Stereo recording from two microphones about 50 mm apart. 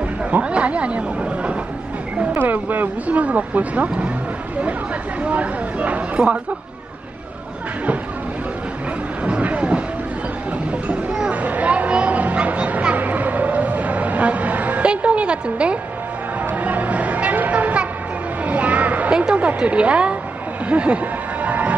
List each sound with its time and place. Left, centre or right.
0.3 s speech: right
2.3 s speech: right
5.2 s speech: right
9.2 s vehicle: right
11.2 s a sound: right
14.9 s a woman's voice: right
16.6 s music: right
19.1 s speech: right
20.6 s music: right